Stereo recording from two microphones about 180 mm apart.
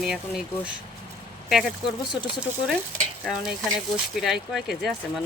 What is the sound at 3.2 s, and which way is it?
Speech, centre (ahead or behind).